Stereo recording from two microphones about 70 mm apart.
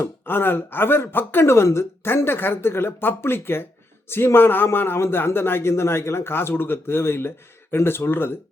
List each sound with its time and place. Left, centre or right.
0.0 s speech: left